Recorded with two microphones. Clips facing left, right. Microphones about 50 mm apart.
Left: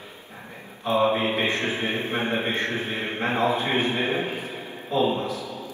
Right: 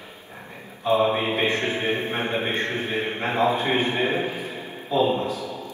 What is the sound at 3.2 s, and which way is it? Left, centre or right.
Speech, left.